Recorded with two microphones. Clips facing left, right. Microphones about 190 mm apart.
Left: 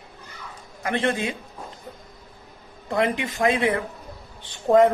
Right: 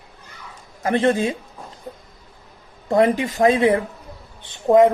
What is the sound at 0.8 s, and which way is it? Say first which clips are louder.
Speech: right 6 dB; 35° right (ahead or behind).